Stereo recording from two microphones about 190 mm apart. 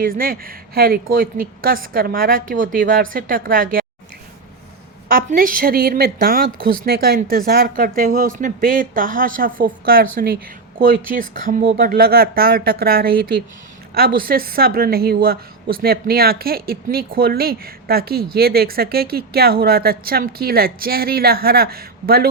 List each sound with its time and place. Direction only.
0.0 s a woman's voice: 50° right (ahead or behind)
5.0 s a woman's voice: 45° right (ahead or behind)